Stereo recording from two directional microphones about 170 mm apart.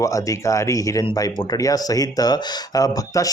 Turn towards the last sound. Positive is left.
turn(degrees=20)  # may be behind; listen again after turning